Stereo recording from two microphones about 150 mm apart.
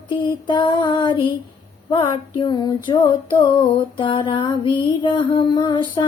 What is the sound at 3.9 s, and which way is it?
Music, 30° left (ahead or behind).